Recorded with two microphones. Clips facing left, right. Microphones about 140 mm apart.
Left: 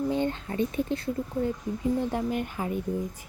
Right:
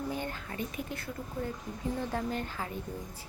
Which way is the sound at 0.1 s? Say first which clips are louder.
Left 9 dB; 25° left (ahead or behind).